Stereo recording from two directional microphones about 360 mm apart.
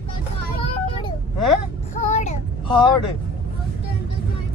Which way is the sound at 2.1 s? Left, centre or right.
Centre.